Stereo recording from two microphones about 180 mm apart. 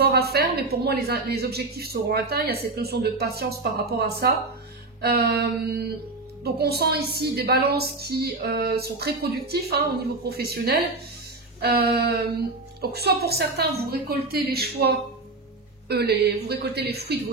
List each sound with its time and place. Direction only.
0.0 s a woman's voice: 60° right (ahead or behind)